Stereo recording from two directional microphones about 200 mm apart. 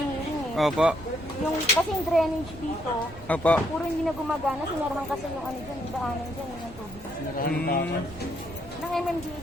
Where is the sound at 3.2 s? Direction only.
5° left (ahead or behind).